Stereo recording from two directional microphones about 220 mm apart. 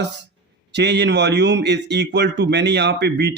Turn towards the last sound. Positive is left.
turn(degrees=-50)  # may be behind; listen again after turning